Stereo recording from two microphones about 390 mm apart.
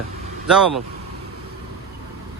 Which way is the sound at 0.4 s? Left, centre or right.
Centre.